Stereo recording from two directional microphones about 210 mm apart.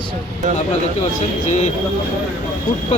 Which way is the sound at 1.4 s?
35° left (ahead or behind).